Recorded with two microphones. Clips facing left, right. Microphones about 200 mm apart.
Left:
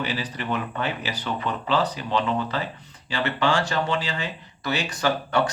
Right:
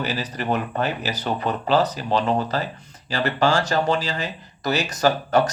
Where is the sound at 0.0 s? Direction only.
40° right (ahead or behind).